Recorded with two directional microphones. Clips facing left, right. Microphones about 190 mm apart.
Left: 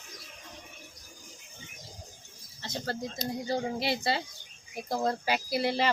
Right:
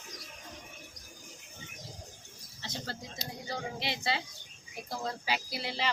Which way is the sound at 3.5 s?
35° left (ahead or behind).